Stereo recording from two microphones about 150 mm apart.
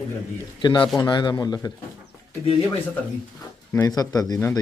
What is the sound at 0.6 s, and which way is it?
Speech, 30° left (ahead or behind).